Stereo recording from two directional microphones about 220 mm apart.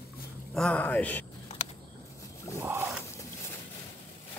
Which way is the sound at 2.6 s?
10° right (ahead or behind).